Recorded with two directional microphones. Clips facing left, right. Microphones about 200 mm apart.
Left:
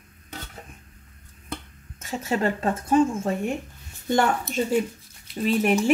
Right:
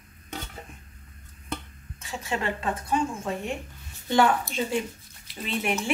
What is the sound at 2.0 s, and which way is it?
A woman's voice, 40° left (ahead or behind).